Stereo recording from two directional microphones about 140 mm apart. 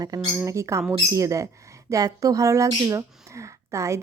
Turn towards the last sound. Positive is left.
turn(degrees=-20)  # may be behind; listen again after turning